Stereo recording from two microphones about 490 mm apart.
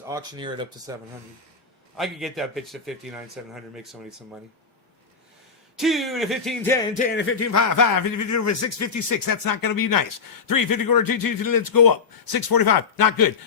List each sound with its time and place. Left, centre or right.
0.0 s speech: centre
2.0 s a man's voice: centre
5.7 s speech: centre; by 13.3 s left